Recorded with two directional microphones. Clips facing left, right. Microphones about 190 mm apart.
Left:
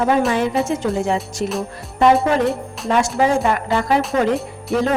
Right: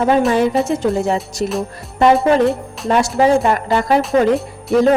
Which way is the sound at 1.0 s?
40° right (ahead or behind).